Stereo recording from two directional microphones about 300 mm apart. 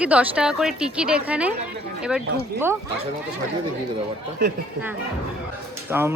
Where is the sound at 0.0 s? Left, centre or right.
Centre.